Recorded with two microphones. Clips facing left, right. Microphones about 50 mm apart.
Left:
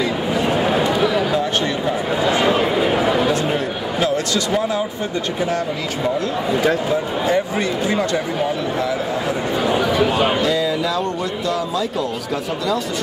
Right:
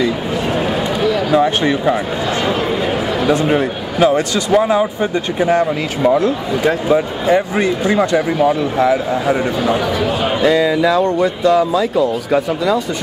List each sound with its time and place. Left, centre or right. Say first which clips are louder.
0.5 s run: even; centre
2.4 s a sound: even; centre
3.3 s a sound: right 5 dB; right
5.4 s speech: right 9 dB; right
7.3 s speech: right 4 dB; right
9.6 s speech: right 1 dB; centre
10.4 s speech: right 6 dB; centre